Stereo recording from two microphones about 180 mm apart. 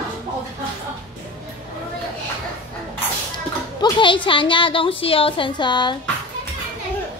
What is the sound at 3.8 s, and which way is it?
A woman's voice, 25° left (ahead or behind).